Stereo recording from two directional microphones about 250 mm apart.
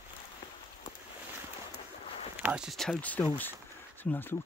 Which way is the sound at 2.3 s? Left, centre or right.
Centre.